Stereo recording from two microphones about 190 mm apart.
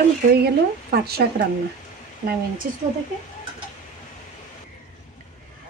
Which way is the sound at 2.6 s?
45° right (ahead or behind).